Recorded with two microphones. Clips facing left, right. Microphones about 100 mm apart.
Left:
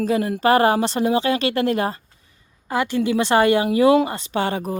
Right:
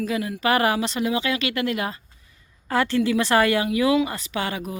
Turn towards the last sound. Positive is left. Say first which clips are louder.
# left 5 dB
turn(degrees=30)  # may be behind; listen again after turning